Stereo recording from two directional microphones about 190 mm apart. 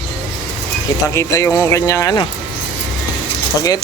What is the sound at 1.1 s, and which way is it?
Speech, 15° left (ahead or behind).